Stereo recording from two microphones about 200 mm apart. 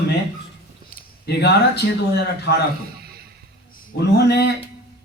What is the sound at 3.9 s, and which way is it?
Speech, 55° left (ahead or behind).